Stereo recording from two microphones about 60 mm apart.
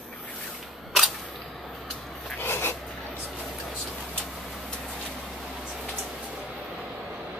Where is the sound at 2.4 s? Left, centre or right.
Left.